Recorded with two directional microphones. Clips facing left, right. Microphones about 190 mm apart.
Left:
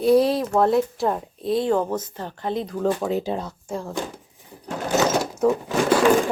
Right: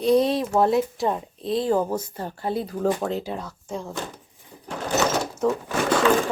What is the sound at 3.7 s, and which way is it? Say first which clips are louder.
Speech: left 1 dB; centre (ahead or behind).